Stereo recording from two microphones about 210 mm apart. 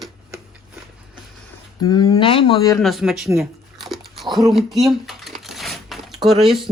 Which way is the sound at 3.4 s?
Centre (ahead or behind).